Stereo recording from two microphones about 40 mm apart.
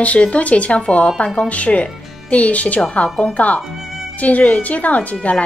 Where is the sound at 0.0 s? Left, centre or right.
Left.